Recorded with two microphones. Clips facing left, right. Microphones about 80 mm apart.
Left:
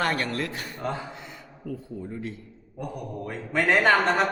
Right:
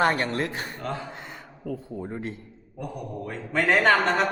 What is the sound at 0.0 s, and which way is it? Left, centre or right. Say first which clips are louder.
Speech: right 3 dB; right.